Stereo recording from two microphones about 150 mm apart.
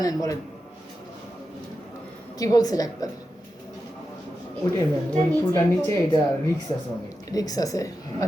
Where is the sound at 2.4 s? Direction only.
25° left (ahead or behind).